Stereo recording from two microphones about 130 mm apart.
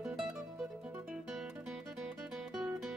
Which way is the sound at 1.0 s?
Centre (ahead or behind).